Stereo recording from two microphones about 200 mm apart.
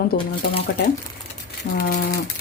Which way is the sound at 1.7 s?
50° left (ahead or behind).